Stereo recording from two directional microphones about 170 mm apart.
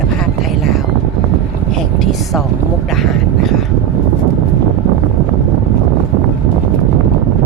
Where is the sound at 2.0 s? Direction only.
Centre (ahead or behind).